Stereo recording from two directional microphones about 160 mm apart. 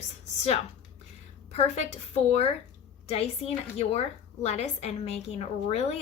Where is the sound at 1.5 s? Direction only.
45° left (ahead or behind).